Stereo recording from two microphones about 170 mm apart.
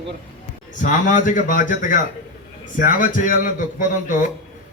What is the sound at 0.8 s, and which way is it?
A man's voice, 50° left (ahead or behind).